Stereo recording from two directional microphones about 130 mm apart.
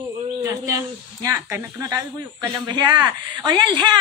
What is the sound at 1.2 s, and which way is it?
Speech, 20° right (ahead or behind).